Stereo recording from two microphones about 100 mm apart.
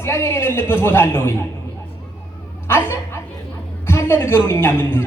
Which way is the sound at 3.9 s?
25° left (ahead or behind).